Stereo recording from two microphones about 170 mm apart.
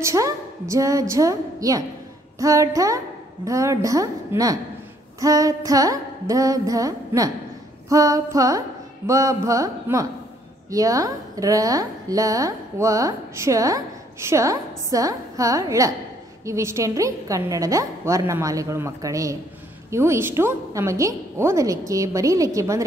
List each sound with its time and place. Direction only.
0.0 s a woman's voice: 20° right (ahead or behind)